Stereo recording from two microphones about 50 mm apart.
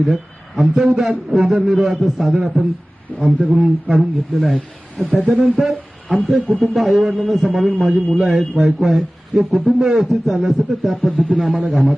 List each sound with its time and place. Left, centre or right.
0.0 s a man's voice: centre
3.1 s speech: left
3.4 s a man's voice: centre
10.9 s a man's voice: centre